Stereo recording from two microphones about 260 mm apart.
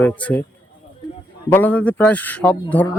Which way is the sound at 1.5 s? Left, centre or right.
Centre.